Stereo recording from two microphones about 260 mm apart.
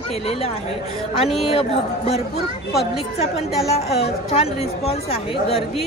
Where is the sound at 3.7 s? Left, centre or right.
Left.